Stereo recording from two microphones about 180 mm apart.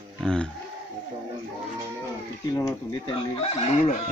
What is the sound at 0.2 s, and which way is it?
Speech, 5° left (ahead or behind).